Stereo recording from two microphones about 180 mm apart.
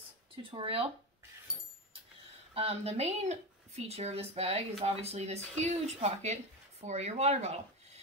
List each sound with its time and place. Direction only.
0.4 s speech: 30° right (ahead or behind)
2.5 s speech: 35° right (ahead or behind)